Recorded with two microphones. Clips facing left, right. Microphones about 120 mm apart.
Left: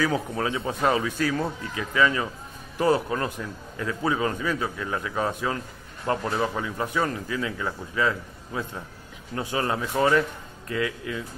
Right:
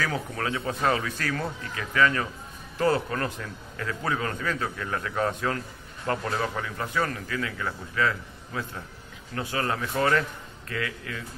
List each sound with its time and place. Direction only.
0.0 s a man's voice: 20° left (ahead or behind)